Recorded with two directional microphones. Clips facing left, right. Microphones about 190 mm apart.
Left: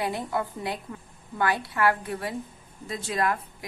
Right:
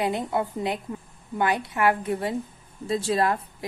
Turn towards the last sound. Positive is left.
turn(degrees=-30)  # may be behind; listen again after turning